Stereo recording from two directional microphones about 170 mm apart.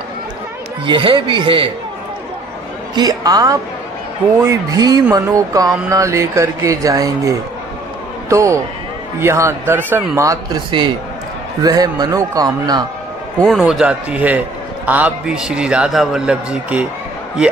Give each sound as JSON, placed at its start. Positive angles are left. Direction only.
{"t": 0.8, "sound": "speech", "side_deg": -30}
{"t": 3.0, "sound": "a man's voice", "side_deg": -20}
{"t": 13.5, "sound": "a man's voice", "side_deg": 0}